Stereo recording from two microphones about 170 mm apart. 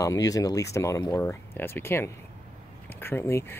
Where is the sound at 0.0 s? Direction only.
20° left (ahead or behind).